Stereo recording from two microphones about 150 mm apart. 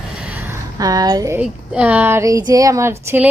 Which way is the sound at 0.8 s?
25° right (ahead or behind).